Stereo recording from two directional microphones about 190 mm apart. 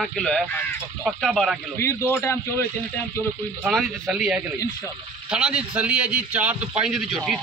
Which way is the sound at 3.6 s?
5° right (ahead or behind).